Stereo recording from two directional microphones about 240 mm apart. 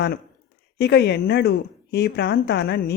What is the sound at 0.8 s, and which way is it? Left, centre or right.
A woman's voice, left.